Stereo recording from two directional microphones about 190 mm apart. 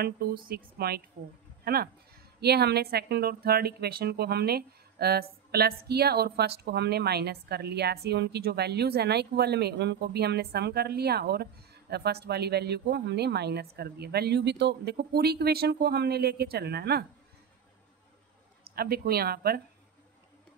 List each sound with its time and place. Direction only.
0.0 s speech: 50° right (ahead or behind)
18.8 s speech: 55° right (ahead or behind)